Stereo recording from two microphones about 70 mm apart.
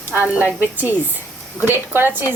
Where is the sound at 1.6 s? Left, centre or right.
Right.